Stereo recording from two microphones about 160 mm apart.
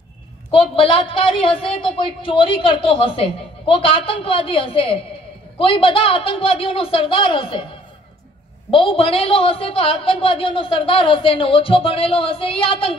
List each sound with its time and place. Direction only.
0.5 s a woman's voice: 35° left (ahead or behind)
8.6 s a woman's voice: 35° left (ahead or behind)